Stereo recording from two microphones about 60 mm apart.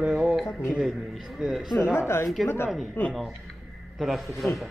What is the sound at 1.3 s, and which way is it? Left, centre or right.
A man's voice, centre.